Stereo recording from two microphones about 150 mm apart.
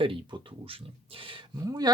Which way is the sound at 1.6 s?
25° right (ahead or behind).